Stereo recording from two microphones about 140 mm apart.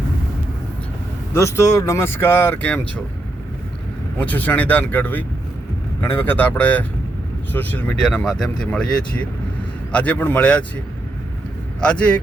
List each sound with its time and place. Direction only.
1.3 s speech: 20° left (ahead or behind)
4.2 s speech: 10° left (ahead or behind)
11.8 s speech: 10° left (ahead or behind)